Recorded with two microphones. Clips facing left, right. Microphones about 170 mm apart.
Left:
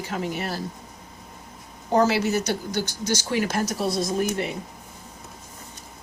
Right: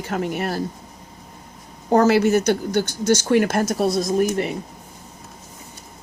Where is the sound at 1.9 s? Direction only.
55° right (ahead or behind).